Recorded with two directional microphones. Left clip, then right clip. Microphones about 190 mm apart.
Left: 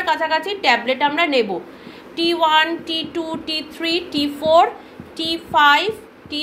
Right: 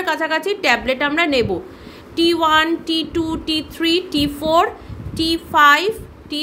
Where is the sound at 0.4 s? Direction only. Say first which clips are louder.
Even; 50° right (ahead or behind).